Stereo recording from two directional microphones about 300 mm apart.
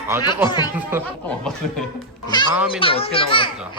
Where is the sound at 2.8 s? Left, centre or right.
Centre.